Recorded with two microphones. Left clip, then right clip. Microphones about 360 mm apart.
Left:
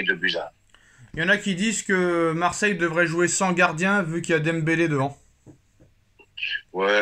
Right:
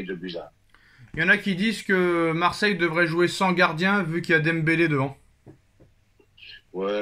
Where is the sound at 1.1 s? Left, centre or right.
Centre.